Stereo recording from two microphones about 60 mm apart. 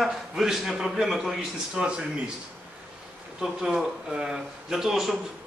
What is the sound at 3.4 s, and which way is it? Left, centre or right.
A man's voice, centre.